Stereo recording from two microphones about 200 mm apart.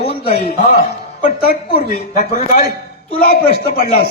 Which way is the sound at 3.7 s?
50° left (ahead or behind).